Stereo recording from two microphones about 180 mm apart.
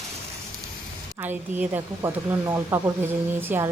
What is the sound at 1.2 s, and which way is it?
Speech, 10° right (ahead or behind).